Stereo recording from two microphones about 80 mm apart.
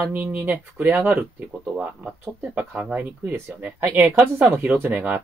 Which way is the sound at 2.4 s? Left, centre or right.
Centre.